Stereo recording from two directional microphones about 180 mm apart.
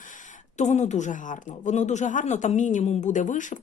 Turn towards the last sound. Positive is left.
turn(degrees=45)  # may be behind; listen again after turning